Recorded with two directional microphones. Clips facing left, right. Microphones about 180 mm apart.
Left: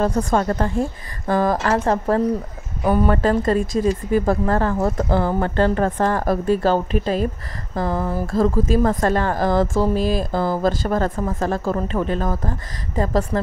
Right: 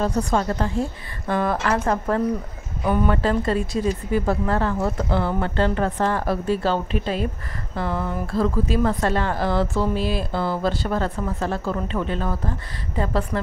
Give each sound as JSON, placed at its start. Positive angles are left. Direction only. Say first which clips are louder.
{"t": 0.0, "sound": "speech", "louder": "left 3 dB", "side_deg": 55}
{"t": 1.3, "sound": "speech", "louder": "left 3 dB", "side_deg": 40}